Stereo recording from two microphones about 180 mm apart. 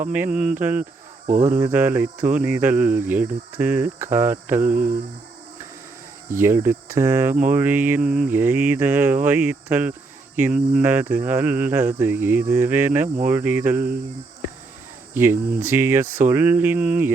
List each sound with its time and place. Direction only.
0.1 s cricket: 5° right (ahead or behind)
0.6 s speech: 10° right (ahead or behind)
1.3 s a sound: 45° right (ahead or behind)
1.5 s speech: 10° right (ahead or behind)
4.7 s a sound: 50° right (ahead or behind)
6.3 s speech: 15° right (ahead or behind)
15.1 s speech: 15° right (ahead or behind)